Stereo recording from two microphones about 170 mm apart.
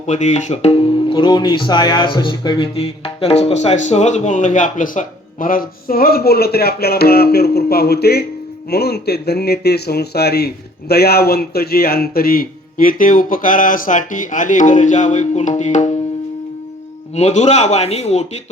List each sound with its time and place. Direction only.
0.0 s speech: 45° left (ahead or behind)
17.2 s a man's voice: 40° left (ahead or behind)